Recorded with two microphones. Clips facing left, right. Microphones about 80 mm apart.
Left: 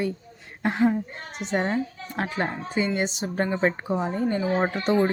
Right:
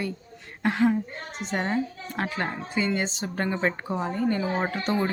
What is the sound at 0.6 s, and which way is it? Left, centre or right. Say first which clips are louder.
A woman's voice: even; left.